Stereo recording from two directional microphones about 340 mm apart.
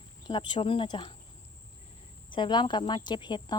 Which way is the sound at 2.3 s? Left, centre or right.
Centre.